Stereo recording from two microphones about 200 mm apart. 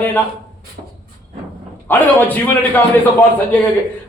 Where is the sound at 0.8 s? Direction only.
40° right (ahead or behind).